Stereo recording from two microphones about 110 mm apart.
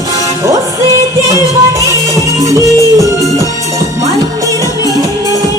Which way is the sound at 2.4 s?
30° right (ahead or behind).